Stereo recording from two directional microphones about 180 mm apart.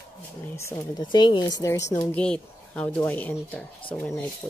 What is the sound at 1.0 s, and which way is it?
Speech, 25° left (ahead or behind).